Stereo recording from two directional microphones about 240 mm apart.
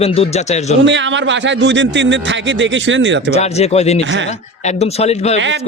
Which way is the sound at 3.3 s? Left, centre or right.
Left.